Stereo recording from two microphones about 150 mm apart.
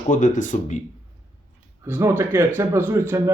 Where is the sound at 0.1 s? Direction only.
55° left (ahead or behind).